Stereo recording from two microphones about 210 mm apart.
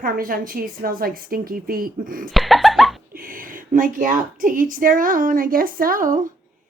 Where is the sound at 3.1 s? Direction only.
40° right (ahead or behind).